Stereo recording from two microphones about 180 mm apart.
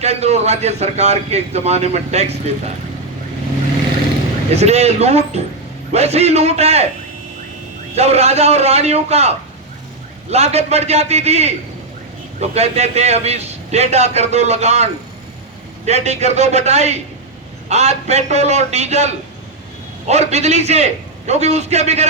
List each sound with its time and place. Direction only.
0.0 s a man's voice: 35° right (ahead or behind)
4.5 s a man's voice: 35° right (ahead or behind)
7.9 s a man's voice: 35° right (ahead or behind)
15.9 s a man's voice: 40° right (ahead or behind)